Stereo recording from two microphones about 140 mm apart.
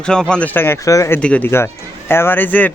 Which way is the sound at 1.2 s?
10° left (ahead or behind).